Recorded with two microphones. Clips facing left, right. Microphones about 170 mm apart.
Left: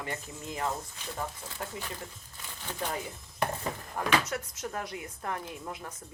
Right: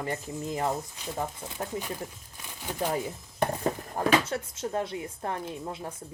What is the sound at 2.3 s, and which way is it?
Crumpling, 15° right (ahead or behind).